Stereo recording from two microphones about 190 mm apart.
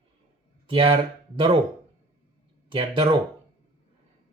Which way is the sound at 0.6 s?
30° right (ahead or behind).